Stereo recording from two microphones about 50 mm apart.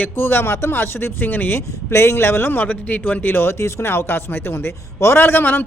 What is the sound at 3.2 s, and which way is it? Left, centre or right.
Speech, left.